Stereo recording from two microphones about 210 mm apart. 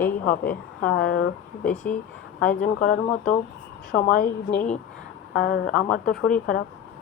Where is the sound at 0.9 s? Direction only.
50° left (ahead or behind).